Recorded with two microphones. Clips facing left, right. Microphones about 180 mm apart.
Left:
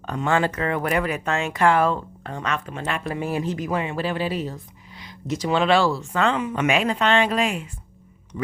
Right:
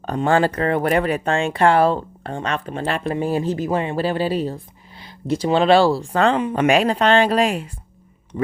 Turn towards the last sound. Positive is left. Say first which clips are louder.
# right 4 dB
turn(degrees=-35)  # may be behind; listen again after turning